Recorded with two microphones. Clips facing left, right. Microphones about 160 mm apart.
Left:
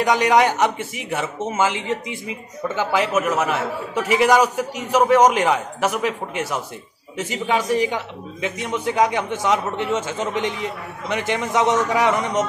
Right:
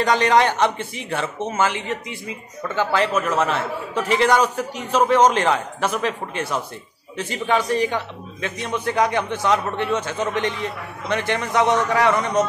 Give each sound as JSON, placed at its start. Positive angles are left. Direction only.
{"t": 0.0, "sound": "a man's voice", "side_deg": 15}